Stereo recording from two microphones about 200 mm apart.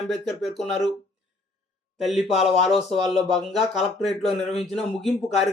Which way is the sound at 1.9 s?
Centre (ahead or behind).